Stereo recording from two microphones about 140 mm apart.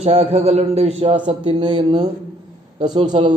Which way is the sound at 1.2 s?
35° right (ahead or behind).